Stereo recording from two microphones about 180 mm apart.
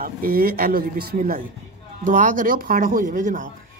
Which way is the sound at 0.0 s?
55° right (ahead or behind).